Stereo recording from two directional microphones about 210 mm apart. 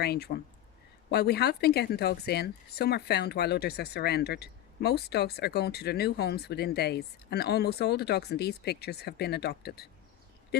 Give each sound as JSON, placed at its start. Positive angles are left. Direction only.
{"t": 0.0, "sound": "speech", "side_deg": 50}